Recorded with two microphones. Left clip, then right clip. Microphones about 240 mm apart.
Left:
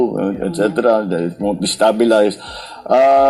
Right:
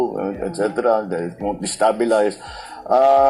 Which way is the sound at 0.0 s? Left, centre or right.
Left.